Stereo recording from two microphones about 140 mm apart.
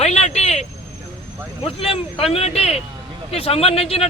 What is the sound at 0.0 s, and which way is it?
Vehicle, 50° left (ahead or behind).